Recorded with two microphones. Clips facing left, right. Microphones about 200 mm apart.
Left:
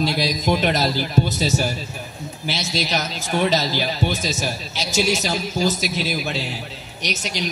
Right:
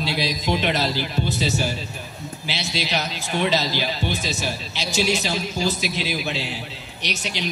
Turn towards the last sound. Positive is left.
turn(degrees=45)  # may be behind; listen again after turning